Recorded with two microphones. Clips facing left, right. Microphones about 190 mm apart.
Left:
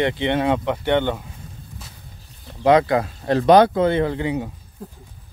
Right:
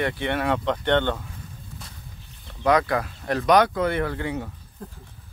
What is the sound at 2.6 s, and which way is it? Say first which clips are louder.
Speech: left 5 dB; 25° left (ahead or behind).